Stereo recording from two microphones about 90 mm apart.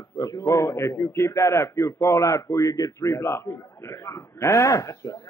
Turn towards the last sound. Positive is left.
turn(degrees=40)  # may be behind; listen again after turning